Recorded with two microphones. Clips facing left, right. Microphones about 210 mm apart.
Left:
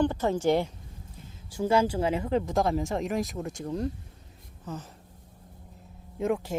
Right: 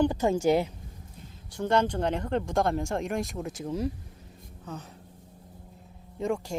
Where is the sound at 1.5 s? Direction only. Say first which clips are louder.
Left 1 dB; 5° left (ahead or behind).